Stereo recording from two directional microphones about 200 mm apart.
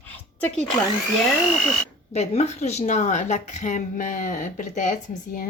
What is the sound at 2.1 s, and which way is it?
Speech, 35° left (ahead or behind).